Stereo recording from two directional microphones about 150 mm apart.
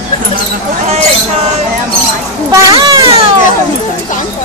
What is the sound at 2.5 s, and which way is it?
Children playing, 20° right (ahead or behind).